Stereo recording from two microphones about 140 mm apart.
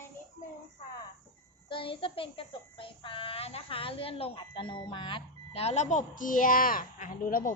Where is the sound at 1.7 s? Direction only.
40° left (ahead or behind); by 7.5 s 80° left.